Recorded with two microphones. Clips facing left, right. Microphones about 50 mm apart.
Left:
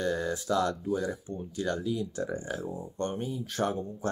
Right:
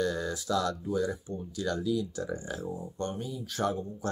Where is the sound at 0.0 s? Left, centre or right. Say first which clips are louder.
Left 1 dB; left.